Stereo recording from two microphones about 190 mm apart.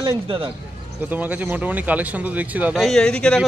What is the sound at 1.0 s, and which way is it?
Speech, 10° right (ahead or behind).